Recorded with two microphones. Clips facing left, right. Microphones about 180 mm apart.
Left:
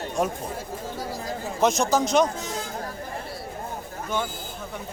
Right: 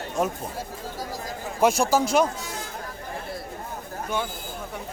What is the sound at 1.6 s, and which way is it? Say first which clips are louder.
Speech: right 1 dB; 10° right (ahead or behind).